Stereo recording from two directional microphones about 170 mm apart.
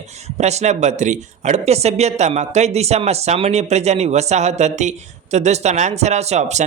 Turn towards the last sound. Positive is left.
turn(degrees=-40)  # may be behind; listen again after turning